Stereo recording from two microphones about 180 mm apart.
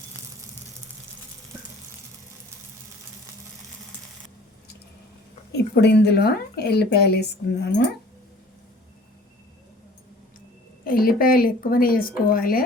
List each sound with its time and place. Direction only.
5.5 s speech: 65° left (ahead or behind)
10.8 s speech: 55° left (ahead or behind)